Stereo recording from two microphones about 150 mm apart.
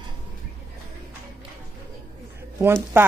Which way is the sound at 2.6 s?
15° right (ahead or behind).